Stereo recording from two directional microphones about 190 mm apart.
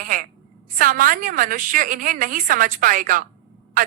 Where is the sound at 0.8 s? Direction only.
45° right (ahead or behind).